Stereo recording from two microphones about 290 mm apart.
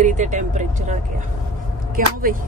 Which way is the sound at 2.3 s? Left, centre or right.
Right.